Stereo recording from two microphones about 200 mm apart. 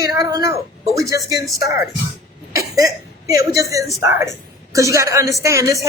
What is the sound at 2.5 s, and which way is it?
A woman's voice, 15° right (ahead or behind).